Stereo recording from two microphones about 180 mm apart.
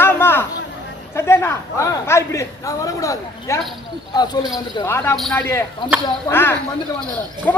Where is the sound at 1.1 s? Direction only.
15° left (ahead or behind).